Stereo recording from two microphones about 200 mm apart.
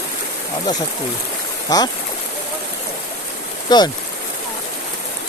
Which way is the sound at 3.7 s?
20° left (ahead or behind).